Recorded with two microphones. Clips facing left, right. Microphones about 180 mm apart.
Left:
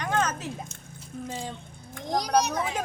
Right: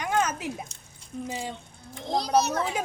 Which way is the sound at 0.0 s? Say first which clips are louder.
Right 1 dB; 10° right (ahead or behind).